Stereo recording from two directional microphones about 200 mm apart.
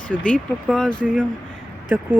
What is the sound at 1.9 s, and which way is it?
Speech, 10° right (ahead or behind).